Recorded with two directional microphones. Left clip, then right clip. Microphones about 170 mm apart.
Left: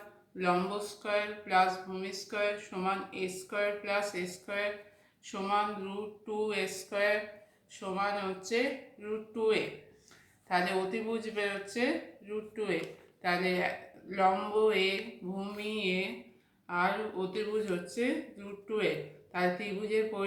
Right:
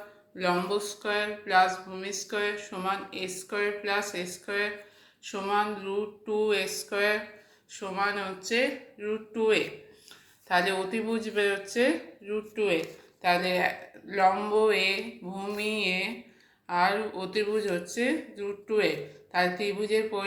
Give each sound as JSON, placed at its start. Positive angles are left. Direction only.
{"t": 0.3, "sound": "speech", "side_deg": -25}
{"t": 19.3, "sound": "speech", "side_deg": -25}